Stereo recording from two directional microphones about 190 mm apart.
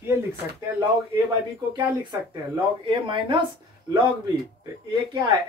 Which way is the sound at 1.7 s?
25° right (ahead or behind).